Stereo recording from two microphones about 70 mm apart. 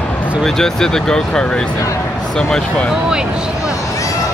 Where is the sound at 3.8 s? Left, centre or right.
Left.